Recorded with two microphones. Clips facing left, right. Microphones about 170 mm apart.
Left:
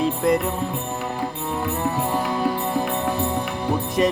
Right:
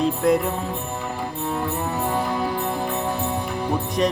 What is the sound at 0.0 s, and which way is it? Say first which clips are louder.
Music: right 1 dB; centre (ahead or behind).